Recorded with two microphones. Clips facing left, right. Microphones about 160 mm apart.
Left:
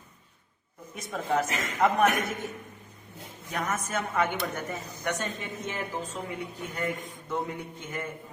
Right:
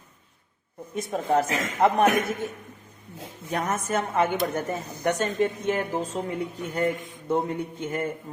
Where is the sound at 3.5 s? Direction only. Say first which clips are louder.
Right 5 dB; 30° right (ahead or behind).